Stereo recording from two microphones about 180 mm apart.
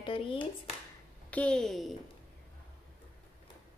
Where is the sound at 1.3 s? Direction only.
5° left (ahead or behind).